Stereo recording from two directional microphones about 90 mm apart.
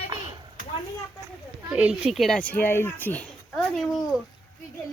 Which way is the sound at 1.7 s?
15° right (ahead or behind).